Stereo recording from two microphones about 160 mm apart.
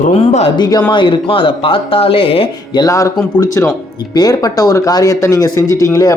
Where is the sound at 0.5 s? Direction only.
25° left (ahead or behind).